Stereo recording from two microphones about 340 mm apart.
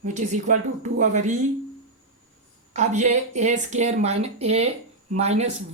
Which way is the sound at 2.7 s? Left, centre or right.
Right.